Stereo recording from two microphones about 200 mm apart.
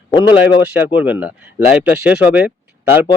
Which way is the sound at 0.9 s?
5° right (ahead or behind).